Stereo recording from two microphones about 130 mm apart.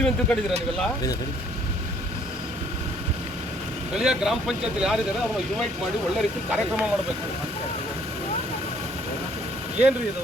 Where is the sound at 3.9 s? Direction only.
5° right (ahead or behind).